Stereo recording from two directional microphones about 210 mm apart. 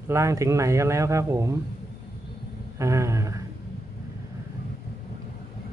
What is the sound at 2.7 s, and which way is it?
Speech, 15° right (ahead or behind).